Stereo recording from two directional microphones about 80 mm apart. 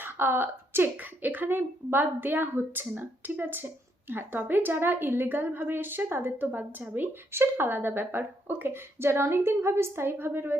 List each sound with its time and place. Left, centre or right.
0.0 s a woman's voice: right